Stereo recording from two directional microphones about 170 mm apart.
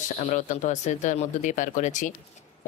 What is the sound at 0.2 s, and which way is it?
Speech, 45° left (ahead or behind).